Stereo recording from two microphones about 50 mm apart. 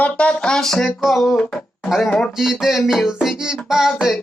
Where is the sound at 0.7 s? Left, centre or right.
Centre.